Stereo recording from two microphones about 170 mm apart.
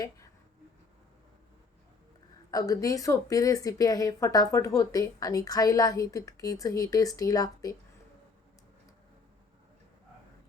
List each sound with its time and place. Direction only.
2.5 s speech: 20° left (ahead or behind)